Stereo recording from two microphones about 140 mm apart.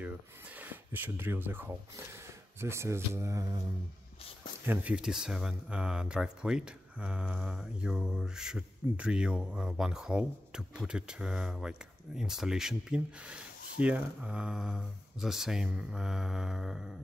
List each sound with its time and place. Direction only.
0.6 s speech: 15° right (ahead or behind)
4.6 s speech: 10° right (ahead or behind)